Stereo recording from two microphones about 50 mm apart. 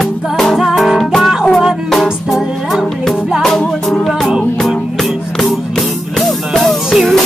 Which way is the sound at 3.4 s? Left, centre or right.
Centre.